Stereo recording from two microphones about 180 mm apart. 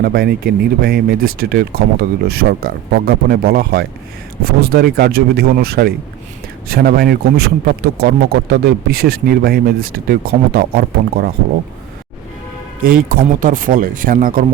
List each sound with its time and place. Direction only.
0.0 s a man's voice: 55° right (ahead or behind)
12.8 s speech: 50° right (ahead or behind)